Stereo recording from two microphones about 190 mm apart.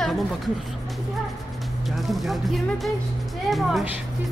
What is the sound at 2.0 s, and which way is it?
Speech, centre (ahead or behind).